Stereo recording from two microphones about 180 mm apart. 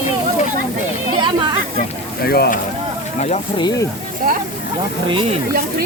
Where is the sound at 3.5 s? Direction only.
25° left (ahead or behind).